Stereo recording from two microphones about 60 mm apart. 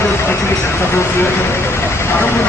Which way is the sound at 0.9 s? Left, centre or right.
Left.